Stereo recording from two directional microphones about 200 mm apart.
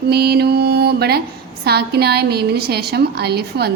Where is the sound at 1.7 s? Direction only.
55° right (ahead or behind).